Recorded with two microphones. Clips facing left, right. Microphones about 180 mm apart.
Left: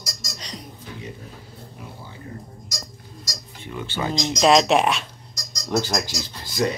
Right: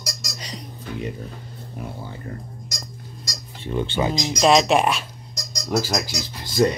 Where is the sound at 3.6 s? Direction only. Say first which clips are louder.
Right 6 dB; 30° right (ahead or behind).